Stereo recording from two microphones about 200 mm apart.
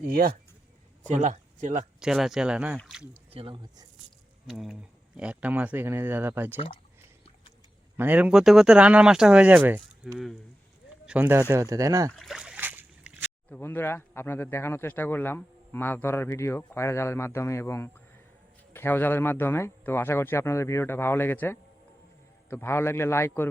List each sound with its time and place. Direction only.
0.0 s speech: 50° right (ahead or behind)
1.0 s speech: 40° right (ahead or behind)
2.0 s speech: centre (ahead or behind)
3.3 s speech: 25° right (ahead or behind)
4.4 s speech: centre (ahead or behind)
7.9 s speech: 10° right (ahead or behind)
12.1 s a sound: centre (ahead or behind)
13.5 s speech: 10° left (ahead or behind)